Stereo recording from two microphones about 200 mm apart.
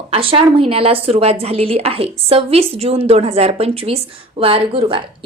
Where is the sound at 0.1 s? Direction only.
30° right (ahead or behind).